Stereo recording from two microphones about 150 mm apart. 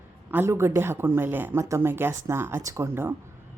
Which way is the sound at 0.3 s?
15° right (ahead or behind).